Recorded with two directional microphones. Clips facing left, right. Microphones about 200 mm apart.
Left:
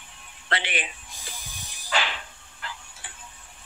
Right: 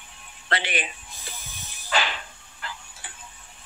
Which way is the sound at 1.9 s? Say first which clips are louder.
Right 2 dB; 40° right (ahead or behind).